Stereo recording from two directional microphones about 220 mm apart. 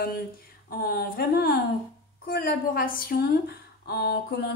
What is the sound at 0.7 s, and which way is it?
A woman's voice, 45° left (ahead or behind).